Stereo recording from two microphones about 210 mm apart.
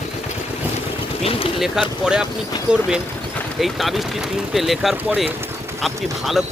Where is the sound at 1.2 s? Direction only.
25° left (ahead or behind).